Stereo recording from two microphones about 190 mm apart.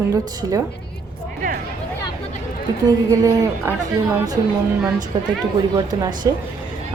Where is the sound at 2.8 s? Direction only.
20° right (ahead or behind).